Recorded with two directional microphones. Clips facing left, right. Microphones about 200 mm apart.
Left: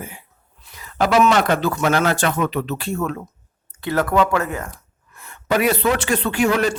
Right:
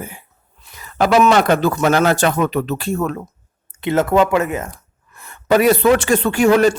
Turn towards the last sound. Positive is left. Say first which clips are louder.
# right 6 dB
turn(degrees=-45)  # may be behind; listen again after turning